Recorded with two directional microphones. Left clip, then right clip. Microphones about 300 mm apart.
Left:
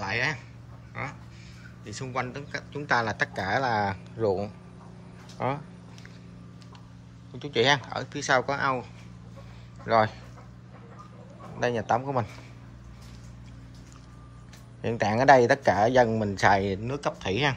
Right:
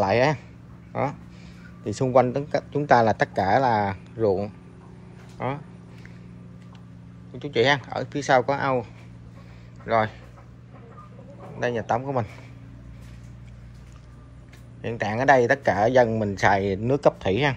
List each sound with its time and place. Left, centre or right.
0.0 s a man's voice: centre
7.3 s speech: centre
9.8 s speech: centre
11.6 s speech: centre
14.8 s speech: centre